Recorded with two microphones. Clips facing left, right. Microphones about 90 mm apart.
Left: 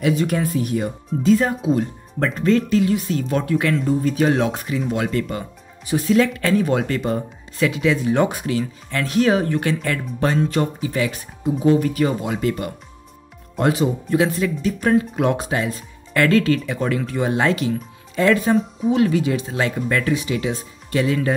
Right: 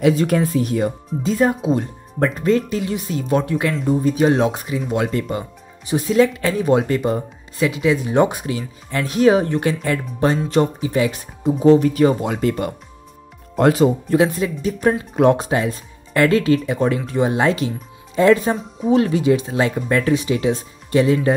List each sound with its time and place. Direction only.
0.1 s speech: 35° right (ahead or behind); by 4.9 s 15° right (ahead or behind)
4.9 s speech: 25° right (ahead or behind)
11.6 s speech: 30° right (ahead or behind)
14.2 s speech: 20° right (ahead or behind)
16.1 s speech: 15° right (ahead or behind)
18.5 s speech: centre (ahead or behind)
18.9 s speech: 35° right (ahead or behind)